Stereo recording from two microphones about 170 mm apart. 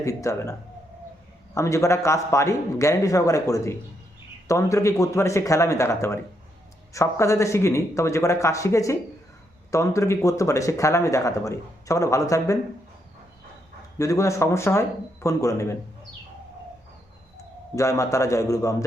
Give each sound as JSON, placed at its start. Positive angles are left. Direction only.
{"t": 0.0, "sound": "a man's voice", "side_deg": 20}
{"t": 1.5, "sound": "a man's voice", "side_deg": 15}
{"t": 14.0, "sound": "a man's voice", "side_deg": 20}
{"t": 17.7, "sound": "speech", "side_deg": 20}